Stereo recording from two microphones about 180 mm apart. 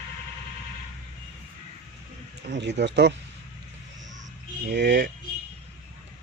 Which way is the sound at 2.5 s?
75° right (ahead or behind).